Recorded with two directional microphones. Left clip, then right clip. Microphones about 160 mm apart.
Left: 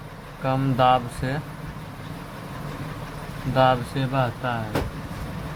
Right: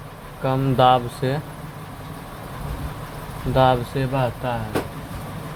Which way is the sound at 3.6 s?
20° right (ahead or behind).